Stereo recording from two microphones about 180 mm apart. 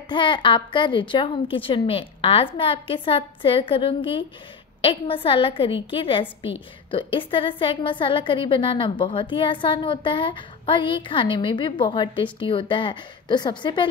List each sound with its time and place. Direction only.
0.1 s a woman's voice: 25° left (ahead or behind)